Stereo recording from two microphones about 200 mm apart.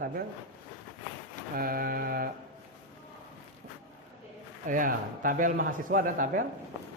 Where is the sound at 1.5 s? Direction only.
45° right (ahead or behind).